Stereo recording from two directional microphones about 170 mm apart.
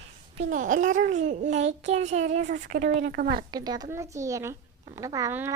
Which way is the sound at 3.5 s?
25° right (ahead or behind).